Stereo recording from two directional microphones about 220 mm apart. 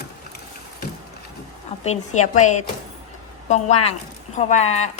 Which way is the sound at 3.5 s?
30° left (ahead or behind).